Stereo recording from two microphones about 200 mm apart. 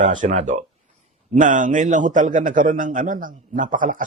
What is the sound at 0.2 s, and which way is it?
A man's voice, 40° right (ahead or behind).